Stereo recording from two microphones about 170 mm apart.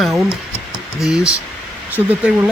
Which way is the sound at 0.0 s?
Centre (ahead or behind).